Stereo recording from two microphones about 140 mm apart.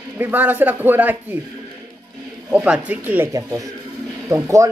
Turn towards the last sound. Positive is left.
turn(degrees=-20)  # may be behind; listen again after turning